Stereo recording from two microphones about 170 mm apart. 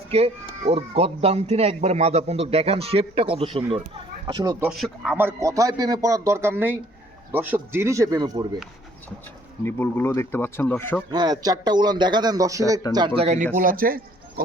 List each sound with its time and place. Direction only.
0.1 s speech: 35° right (ahead or behind)
4.6 s speech: centre (ahead or behind)
5.2 s a man's voice: 20° right (ahead or behind)
9.6 s speech: 10° left (ahead or behind)
11.1 s a man's voice: 25° right (ahead or behind); by 14.4 s 60° right (ahead or behind)